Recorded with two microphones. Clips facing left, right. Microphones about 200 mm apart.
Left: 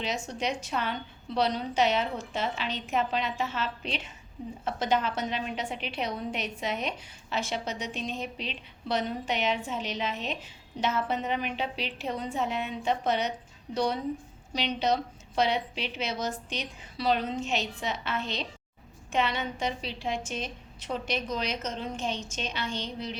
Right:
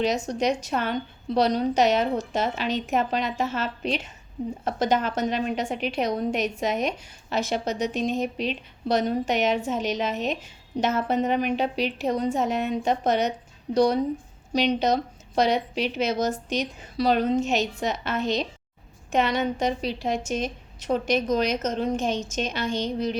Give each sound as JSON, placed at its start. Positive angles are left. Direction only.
{"t": 0.0, "sound": "a woman's voice", "side_deg": -40}